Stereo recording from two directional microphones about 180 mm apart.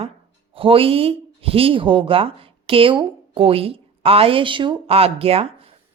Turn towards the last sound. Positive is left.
turn(degrees=-35)  # may be behind; listen again after turning